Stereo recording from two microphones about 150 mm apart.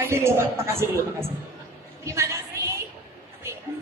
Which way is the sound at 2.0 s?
20° right (ahead or behind).